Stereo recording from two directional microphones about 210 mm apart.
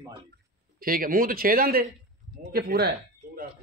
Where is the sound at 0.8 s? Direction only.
45° right (ahead or behind).